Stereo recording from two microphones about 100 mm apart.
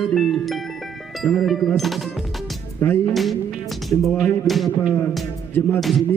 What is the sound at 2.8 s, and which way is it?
Music, 20° left (ahead or behind).